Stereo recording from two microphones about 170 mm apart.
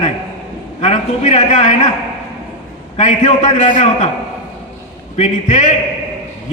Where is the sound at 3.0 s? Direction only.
45° left (ahead or behind).